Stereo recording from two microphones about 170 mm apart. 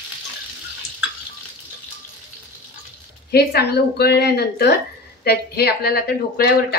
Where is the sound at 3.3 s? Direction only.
70° left (ahead or behind).